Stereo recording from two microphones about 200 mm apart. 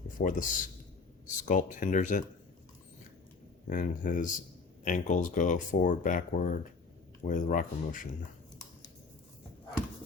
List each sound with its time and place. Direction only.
0.2 s speech: 40° left (ahead or behind)
3.7 s speech: 40° left (ahead or behind)